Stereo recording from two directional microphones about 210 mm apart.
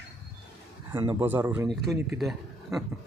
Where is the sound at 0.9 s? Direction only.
15° right (ahead or behind); by 2.8 s centre (ahead or behind).